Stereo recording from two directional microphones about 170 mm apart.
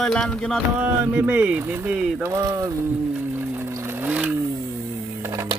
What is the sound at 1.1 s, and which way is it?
Speech, 10° right (ahead or behind).